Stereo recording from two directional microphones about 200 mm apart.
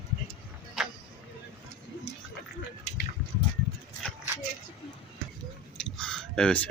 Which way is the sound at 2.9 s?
35° left (ahead or behind).